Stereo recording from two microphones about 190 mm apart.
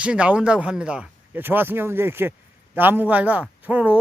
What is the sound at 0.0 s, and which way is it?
Speech, 5° right (ahead or behind).